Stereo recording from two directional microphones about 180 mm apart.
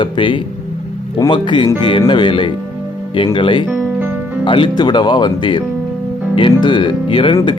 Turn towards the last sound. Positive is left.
turn(degrees=25)  # may be behind; listen again after turning